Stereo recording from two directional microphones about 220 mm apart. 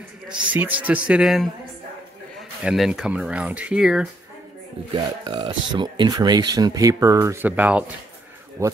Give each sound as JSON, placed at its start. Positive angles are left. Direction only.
{"t": 0.5, "sound": "speech", "side_deg": -5}
{"t": 2.6, "sound": "speech", "side_deg": -5}
{"t": 4.9, "sound": "speech", "side_deg": -20}